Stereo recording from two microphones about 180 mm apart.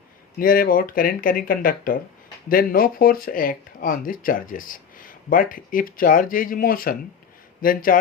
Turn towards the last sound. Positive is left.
turn(degrees=50)  # may be behind; listen again after turning